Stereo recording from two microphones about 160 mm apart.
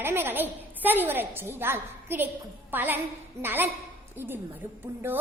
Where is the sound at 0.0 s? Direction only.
15° right (ahead or behind).